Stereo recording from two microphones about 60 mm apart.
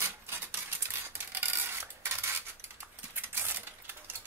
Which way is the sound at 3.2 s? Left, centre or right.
Right.